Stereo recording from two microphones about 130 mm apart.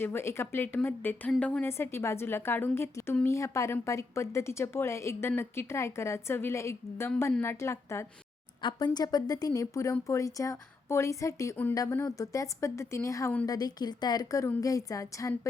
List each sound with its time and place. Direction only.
0.0 s a woman's voice: 15° left (ahead or behind)
8.6 s a woman's voice: 35° left (ahead or behind)